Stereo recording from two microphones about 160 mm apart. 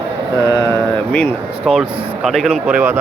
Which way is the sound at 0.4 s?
25° left (ahead or behind).